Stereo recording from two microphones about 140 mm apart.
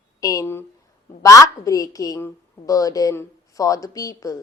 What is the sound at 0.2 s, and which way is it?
A woman's voice, 25° left (ahead or behind).